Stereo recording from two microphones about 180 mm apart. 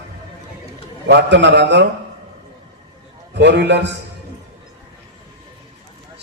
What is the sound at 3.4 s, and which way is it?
Speech, 75° right (ahead or behind).